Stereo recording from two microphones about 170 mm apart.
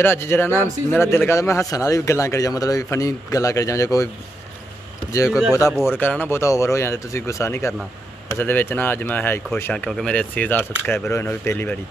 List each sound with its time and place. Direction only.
0.0 s speech: 15° left (ahead or behind)
5.1 s speech: 20° left (ahead or behind)